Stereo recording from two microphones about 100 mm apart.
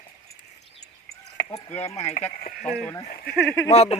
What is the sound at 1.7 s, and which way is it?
Speech, 90° left.